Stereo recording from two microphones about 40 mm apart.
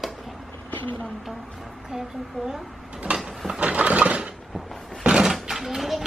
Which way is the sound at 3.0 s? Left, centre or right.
Right.